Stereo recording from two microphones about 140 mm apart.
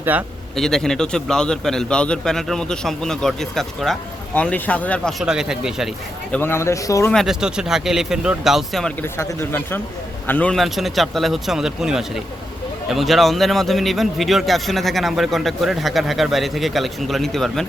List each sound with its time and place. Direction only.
0.0 s speech: 10° right (ahead or behind)
0.5 s a man's voice: 5° left (ahead or behind)
5.2 s a man's voice: 5° right (ahead or behind)
6.3 s speech: 15° left (ahead or behind)
7.1 s a man's voice: centre (ahead or behind)
9.0 s a man's voice: 15° left (ahead or behind)